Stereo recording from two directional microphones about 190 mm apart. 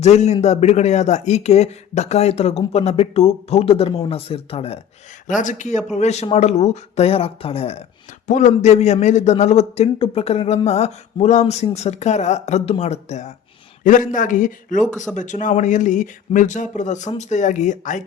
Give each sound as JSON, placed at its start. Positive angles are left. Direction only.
{"t": 0.0, "sound": "a man's voice", "side_deg": 35}